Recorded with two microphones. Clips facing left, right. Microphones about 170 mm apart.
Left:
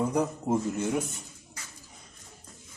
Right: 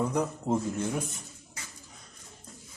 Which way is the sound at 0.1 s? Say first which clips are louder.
Left 1 dB; 10° left (ahead or behind).